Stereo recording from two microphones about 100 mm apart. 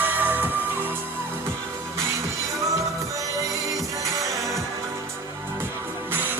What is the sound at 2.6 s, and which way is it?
Music, 35° right (ahead or behind).